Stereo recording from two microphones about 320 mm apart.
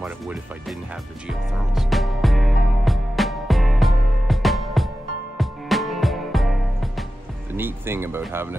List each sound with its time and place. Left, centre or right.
0.0 s speech: centre
1.2 s music: centre
7.5 s speech: centre